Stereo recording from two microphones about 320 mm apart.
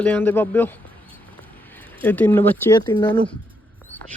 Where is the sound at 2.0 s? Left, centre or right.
Centre.